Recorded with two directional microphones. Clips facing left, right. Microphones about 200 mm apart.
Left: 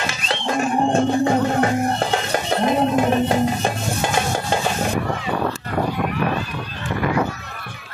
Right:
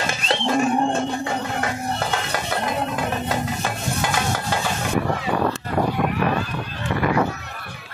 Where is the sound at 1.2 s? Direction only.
30° left (ahead or behind).